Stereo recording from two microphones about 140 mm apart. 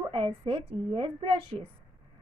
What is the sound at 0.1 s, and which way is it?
A woman's voice, 45° right (ahead or behind).